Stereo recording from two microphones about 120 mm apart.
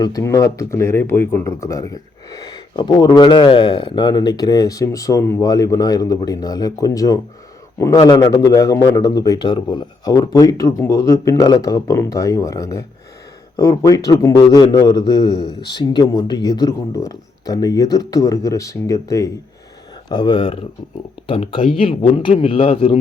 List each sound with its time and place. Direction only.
0.0 s a man's voice: 30° left (ahead or behind)
20.1 s a man's voice: 40° left (ahead or behind)